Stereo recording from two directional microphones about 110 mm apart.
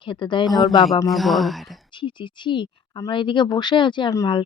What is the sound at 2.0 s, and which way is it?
Speech, 45° left (ahead or behind).